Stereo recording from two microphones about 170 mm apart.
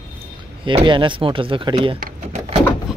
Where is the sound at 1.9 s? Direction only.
55° right (ahead or behind).